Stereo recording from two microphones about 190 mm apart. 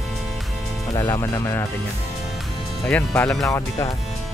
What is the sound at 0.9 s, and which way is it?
Speech, 15° left (ahead or behind).